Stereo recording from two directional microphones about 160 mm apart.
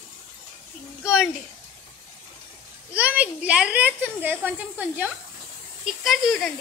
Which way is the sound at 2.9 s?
10° right (ahead or behind).